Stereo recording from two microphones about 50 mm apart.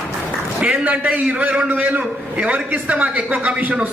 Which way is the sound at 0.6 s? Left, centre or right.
Right.